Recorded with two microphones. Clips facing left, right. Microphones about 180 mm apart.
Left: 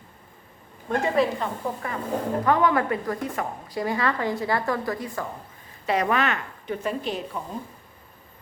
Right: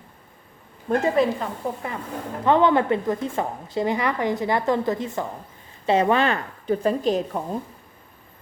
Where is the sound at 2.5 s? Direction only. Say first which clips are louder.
Right 5 dB; 25° right (ahead or behind).